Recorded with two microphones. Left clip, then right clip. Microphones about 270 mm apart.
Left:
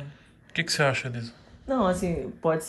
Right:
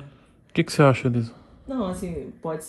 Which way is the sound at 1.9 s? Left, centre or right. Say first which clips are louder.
Left 5 dB; centre.